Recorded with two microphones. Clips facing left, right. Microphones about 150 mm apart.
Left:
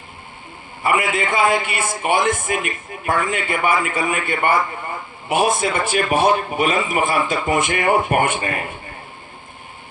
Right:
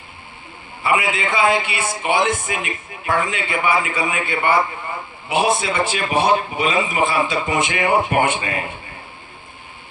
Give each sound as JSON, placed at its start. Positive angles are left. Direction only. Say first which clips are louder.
{"t": 0.8, "sound": "a man's voice", "louder": "left 1 dB", "side_deg": 50}